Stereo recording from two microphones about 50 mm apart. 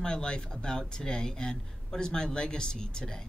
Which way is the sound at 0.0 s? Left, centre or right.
Centre.